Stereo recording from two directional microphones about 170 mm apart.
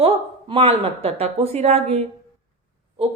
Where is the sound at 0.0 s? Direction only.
30° right (ahead or behind).